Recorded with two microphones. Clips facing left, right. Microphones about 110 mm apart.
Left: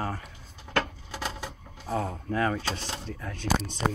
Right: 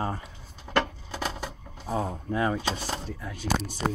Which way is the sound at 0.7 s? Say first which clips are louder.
Right 3 dB; 15° right (ahead or behind).